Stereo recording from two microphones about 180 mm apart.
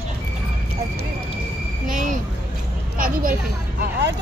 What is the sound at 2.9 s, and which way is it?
Speech, 50° right (ahead or behind).